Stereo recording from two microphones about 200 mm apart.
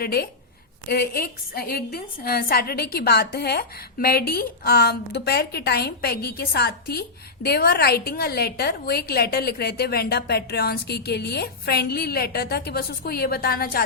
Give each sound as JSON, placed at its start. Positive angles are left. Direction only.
{"t": 0.0, "sound": "a woman's voice", "side_deg": 50}